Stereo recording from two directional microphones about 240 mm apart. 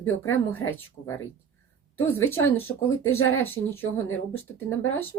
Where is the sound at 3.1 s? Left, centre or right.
Left.